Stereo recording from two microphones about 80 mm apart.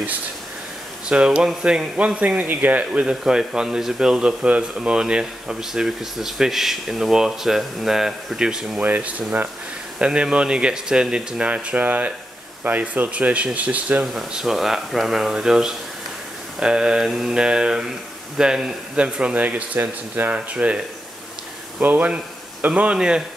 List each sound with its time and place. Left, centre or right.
1.0 s speech: centre
8.8 s speech: right
14.0 s speech: centre